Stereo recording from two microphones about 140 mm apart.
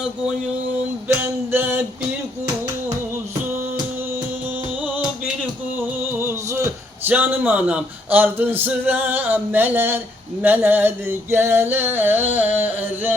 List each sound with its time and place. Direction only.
1.0 s music: 15° right (ahead or behind)
5.7 s music: 20° right (ahead or behind)
7.1 s speech: 15° right (ahead or behind)